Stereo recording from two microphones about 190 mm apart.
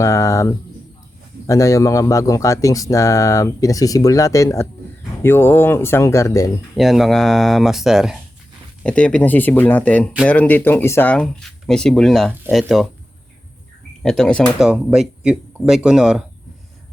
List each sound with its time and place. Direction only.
0.0 s speech: 15° left (ahead or behind)
6.7 s speech: centre (ahead or behind)
14.0 s speech: 5° left (ahead or behind)